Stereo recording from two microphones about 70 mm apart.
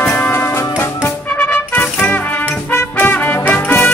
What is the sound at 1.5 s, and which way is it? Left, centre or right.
Music, left.